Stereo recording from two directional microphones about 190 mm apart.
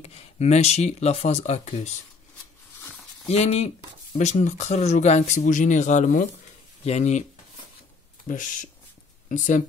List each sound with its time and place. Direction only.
0.0 s speech: 35° left (ahead or behind)
3.3 s speech: 35° left (ahead or behind)
8.3 s speech: 45° left (ahead or behind)